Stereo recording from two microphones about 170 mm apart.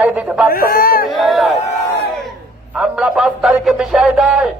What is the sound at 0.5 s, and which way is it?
Chatter, 60° left (ahead or behind).